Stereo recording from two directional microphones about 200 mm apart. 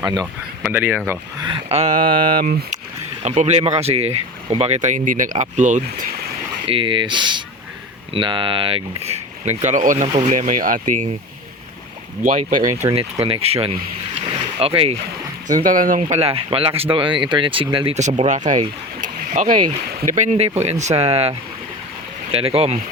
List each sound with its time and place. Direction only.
0.0 s speech: 20° right (ahead or behind)
0.6 s speech: 10° right (ahead or behind); by 2.7 s 45° right (ahead or behind)
3.2 s speech: 35° right (ahead or behind)
6.7 s speech: 25° right (ahead or behind); by 11.1 s 40° right (ahead or behind)
12.2 s speech: 45° right (ahead or behind)
12.9 s speech: 30° right (ahead or behind)
14.2 s boat: 30° right (ahead or behind)
15.6 s speech: 45° right (ahead or behind)
19.0 s a sound: 40° right (ahead or behind)
19.9 s speech: 50° right (ahead or behind)
20.1 s speech: 35° right (ahead or behind)